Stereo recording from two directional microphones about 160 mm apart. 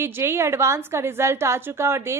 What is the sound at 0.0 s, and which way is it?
A woman's voice, 15° right (ahead or behind).